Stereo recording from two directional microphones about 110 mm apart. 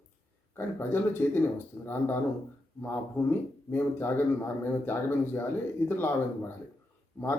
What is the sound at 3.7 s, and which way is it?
Speech, 20° left (ahead or behind).